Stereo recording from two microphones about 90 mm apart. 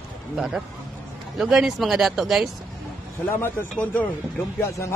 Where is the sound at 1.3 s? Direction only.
5° right (ahead or behind).